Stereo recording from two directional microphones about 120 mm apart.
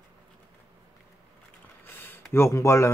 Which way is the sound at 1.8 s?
20° left (ahead or behind).